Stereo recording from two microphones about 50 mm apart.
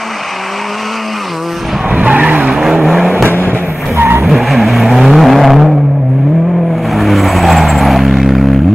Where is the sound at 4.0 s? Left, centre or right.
Right.